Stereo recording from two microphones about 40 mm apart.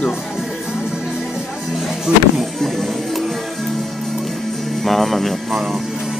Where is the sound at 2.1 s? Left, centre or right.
Right.